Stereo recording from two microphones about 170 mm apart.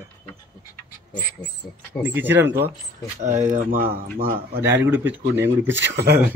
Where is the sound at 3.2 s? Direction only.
45° right (ahead or behind).